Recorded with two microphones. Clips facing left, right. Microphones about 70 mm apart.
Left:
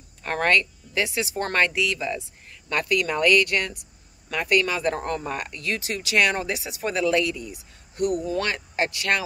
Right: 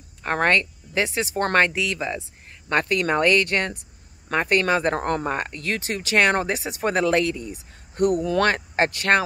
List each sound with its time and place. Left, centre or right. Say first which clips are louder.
0.2 s speech: right 1 dB; right
8.2 s speech: right 5 dB; right
8.5 s speech: right 5 dB; right